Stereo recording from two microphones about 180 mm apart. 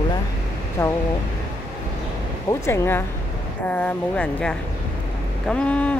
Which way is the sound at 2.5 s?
15° left (ahead or behind).